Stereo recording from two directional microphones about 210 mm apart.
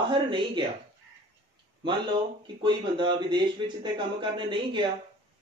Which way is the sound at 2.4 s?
20° right (ahead or behind).